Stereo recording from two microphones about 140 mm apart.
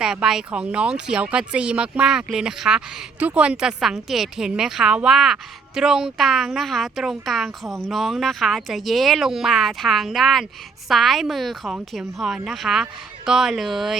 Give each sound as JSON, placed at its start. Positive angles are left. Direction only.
{"t": 0.0, "sound": "speech", "side_deg": -5}